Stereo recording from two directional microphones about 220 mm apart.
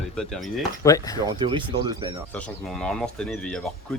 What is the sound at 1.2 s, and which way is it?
Speech, 20° right (ahead or behind).